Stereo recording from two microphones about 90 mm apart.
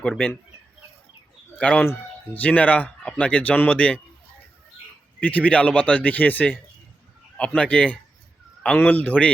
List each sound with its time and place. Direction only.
1.5 s speech: 15° left (ahead or behind)
5.2 s speech: 15° left (ahead or behind)